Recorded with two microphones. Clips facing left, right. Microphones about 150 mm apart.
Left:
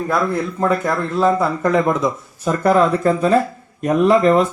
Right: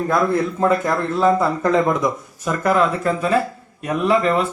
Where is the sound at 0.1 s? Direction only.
10° right (ahead or behind).